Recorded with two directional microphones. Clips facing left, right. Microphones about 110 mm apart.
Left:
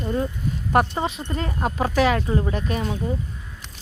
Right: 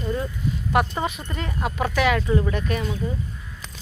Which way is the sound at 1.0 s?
30° left (ahead or behind).